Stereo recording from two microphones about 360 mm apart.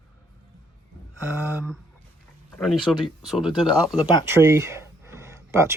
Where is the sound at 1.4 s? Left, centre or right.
Centre.